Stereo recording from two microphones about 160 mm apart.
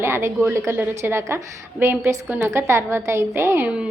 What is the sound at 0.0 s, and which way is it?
A woman's voice, 15° right (ahead or behind).